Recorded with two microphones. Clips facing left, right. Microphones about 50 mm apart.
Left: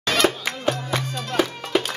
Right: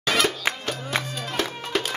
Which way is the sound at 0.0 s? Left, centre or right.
Centre.